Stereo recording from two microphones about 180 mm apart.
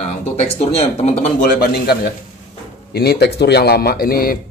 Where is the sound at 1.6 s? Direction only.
55° left (ahead or behind).